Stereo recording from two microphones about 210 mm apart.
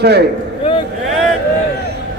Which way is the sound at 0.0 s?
50° right (ahead or behind).